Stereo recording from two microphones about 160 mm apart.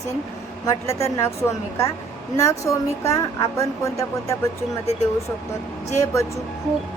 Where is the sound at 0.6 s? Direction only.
20° left (ahead or behind).